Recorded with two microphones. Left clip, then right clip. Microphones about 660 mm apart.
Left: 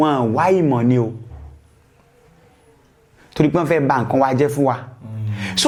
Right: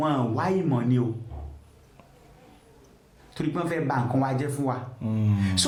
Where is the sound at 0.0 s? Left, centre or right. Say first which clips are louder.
Left 10 dB; left.